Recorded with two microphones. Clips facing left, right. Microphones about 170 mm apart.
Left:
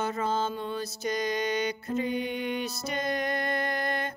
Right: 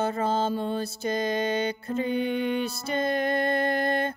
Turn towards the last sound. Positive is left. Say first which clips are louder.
# right 5 dB
turn(degrees=-30)  # may be behind; listen again after turning